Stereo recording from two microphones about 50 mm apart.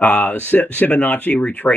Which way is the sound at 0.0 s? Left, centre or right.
Left.